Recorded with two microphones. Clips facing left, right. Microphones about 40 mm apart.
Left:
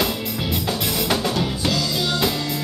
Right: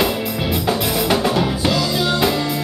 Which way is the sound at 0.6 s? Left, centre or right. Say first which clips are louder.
Right 5 dB; centre.